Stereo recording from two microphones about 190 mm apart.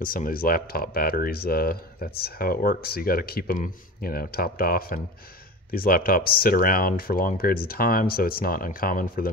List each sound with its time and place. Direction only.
0.0 s speech: 45° left (ahead or behind)